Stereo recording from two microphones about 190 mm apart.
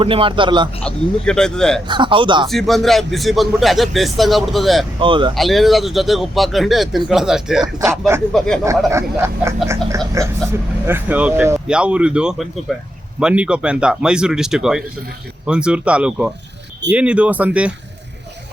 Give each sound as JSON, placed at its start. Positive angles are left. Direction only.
{"t": 0.0, "sound": "speech", "side_deg": -30}
{"t": 0.9, "sound": "speech", "side_deg": 5}
{"t": 1.9, "sound": "speech", "side_deg": -25}
{"t": 2.5, "sound": "speech", "side_deg": 0}
{"t": 4.9, "sound": "speech", "side_deg": -25}
{"t": 5.3, "sound": "speech", "side_deg": 0}
{"t": 7.9, "sound": "speech", "side_deg": -15}
{"t": 8.3, "sound": "speech", "side_deg": 5}
{"t": 8.9, "sound": "speech", "side_deg": -15}